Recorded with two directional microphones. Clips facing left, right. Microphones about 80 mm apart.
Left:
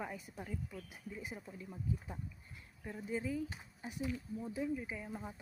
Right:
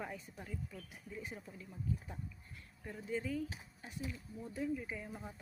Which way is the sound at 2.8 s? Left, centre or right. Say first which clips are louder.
Left 1 dB; centre.